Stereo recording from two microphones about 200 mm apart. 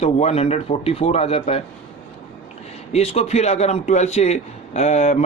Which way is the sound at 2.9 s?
30° left (ahead or behind).